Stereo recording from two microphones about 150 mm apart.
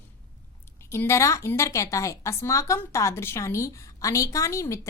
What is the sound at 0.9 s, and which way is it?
A woman's voice, 15° left (ahead or behind).